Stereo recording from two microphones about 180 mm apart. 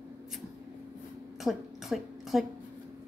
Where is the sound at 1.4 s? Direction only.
Centre (ahead or behind).